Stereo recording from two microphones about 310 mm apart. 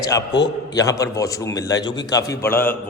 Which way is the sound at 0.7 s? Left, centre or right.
Centre.